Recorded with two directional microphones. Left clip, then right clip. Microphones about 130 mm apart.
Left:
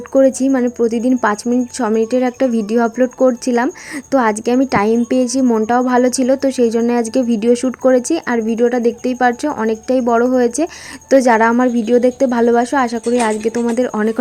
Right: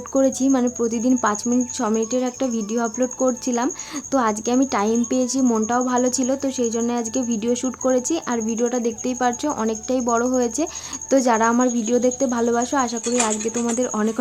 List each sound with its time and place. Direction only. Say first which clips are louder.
0.1 s speech: left 7 dB; 30° left (ahead or behind)